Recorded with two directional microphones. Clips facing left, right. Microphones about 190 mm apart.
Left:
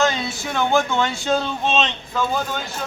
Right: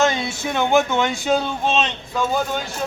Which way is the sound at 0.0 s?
25° right (ahead or behind).